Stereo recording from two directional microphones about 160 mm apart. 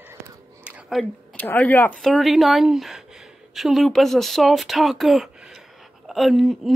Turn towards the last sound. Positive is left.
turn(degrees=0)  # may be behind; listen again after turning